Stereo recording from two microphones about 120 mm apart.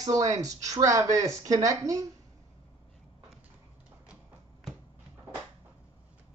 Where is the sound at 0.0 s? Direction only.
30° right (ahead or behind).